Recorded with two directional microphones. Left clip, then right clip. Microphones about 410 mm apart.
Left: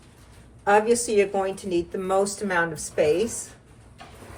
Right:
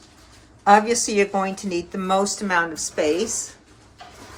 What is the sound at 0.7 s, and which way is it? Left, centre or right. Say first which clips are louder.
Speech: right 4 dB; right.